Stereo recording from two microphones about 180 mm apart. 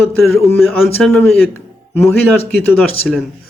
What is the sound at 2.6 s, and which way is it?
Speech, 10° left (ahead or behind).